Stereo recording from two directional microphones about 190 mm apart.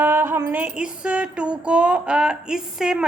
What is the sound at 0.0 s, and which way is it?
Female singing, 10° right (ahead or behind).